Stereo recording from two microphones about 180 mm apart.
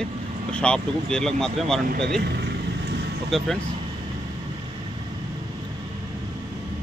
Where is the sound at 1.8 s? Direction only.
65° right (ahead or behind).